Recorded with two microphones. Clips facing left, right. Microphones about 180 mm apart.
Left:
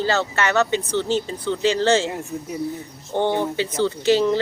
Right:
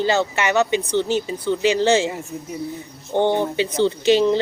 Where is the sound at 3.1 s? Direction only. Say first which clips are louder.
Right 2 dB; 15° right (ahead or behind).